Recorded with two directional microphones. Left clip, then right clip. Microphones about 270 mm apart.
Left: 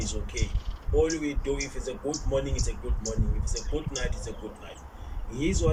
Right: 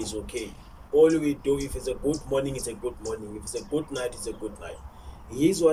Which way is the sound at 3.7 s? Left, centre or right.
Centre.